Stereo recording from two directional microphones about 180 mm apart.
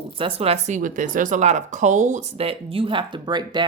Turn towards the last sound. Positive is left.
turn(degrees=-25)  # may be behind; listen again after turning